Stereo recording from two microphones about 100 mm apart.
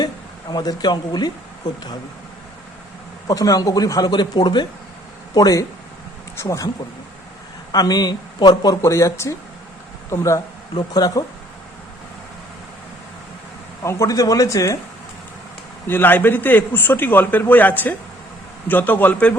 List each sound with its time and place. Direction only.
0.5 s speech: 45° left (ahead or behind)
3.2 s speech: 35° left (ahead or behind)
7.7 s speech: 40° left (ahead or behind)
8.8 s a man's voice: 30° left (ahead or behind)
13.8 s speech: 30° left (ahead or behind)
15.9 s a man's voice: 20° left (ahead or behind)